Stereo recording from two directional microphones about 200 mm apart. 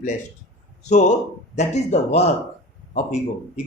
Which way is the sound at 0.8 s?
35° left (ahead or behind).